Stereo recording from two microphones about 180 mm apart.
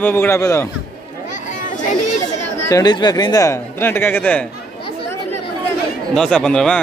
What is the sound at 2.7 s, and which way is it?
Speech, 25° left (ahead or behind).